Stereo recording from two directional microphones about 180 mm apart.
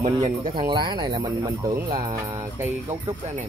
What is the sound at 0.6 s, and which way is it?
Speech, 25° right (ahead or behind).